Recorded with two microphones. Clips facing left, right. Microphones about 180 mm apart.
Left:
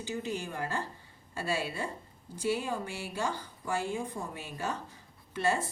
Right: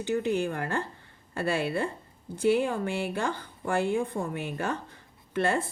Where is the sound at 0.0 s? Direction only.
60° right (ahead or behind).